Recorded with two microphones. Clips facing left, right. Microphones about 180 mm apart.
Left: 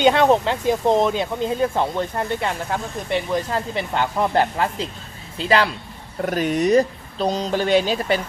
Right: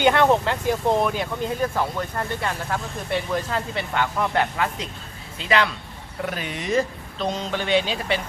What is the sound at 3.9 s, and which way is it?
Speech, 35° left (ahead or behind).